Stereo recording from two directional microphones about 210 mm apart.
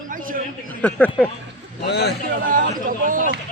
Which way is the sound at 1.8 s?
50° left (ahead or behind).